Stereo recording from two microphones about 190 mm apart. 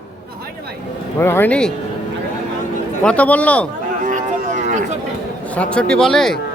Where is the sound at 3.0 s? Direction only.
5° left (ahead or behind).